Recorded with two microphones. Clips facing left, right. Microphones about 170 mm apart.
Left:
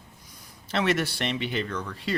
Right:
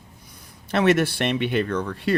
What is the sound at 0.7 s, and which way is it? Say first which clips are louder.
Speech: right 6 dB; 55° right (ahead or behind).